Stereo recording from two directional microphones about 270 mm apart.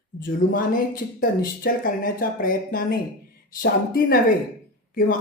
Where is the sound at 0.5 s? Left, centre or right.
Left.